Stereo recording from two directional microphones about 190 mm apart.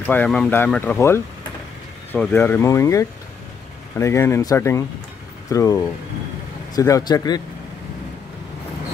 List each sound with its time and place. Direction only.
0.0 s speech: 10° left (ahead or behind)